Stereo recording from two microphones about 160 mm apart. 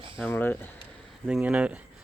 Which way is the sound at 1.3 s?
5° right (ahead or behind).